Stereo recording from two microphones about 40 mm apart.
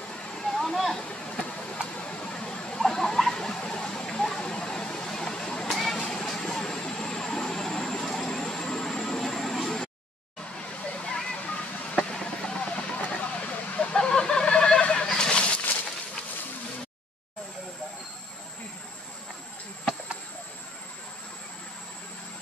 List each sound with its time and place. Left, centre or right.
0.1 s a sound: centre
0.9 s vehicle: centre
1.7 s a sound: left
2.8 s rodents: centre
3.5 s vehicle: left
5.7 s vehicle: centre
5.9 s vehicle: centre
10.7 s waterfall: left
11.9 s vehicle: centre; by 13.8 s left
13.9 s fowl: centre
14.8 s a sound: left